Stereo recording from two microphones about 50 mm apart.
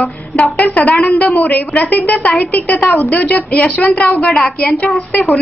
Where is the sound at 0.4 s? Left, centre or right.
Left.